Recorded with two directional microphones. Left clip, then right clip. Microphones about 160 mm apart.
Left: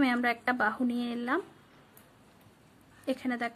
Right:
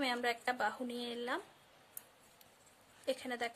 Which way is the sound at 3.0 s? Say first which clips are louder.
Left 5 dB; 20° right (ahead or behind).